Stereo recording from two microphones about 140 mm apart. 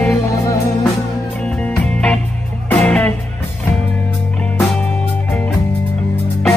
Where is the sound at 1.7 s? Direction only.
5° left (ahead or behind).